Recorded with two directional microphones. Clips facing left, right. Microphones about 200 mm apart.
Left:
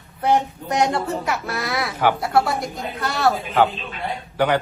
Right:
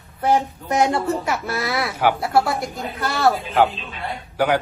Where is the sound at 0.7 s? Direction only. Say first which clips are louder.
Right 2 dB; centre (ahead or behind).